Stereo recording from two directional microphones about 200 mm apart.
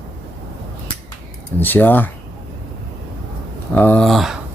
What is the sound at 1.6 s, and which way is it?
Speech, 10° left (ahead or behind).